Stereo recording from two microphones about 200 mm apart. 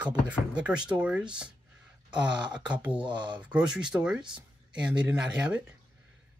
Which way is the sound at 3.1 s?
25° right (ahead or behind).